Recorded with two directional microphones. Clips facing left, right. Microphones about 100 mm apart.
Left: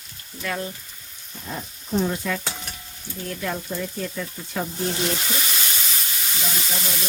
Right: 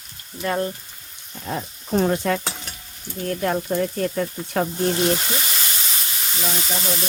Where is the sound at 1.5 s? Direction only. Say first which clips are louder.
Right 4 dB; 70° right (ahead or behind).